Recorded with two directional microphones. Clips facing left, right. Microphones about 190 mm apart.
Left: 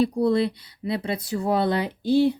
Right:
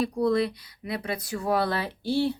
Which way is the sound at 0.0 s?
30° left (ahead or behind).